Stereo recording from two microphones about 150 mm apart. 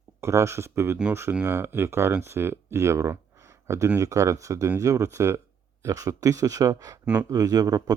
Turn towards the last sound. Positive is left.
turn(degrees=-25)  # may be behind; listen again after turning